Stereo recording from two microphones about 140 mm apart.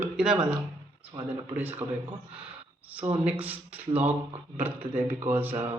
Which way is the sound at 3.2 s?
10° right (ahead or behind).